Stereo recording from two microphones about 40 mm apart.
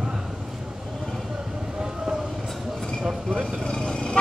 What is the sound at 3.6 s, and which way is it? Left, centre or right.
Vehicle, left.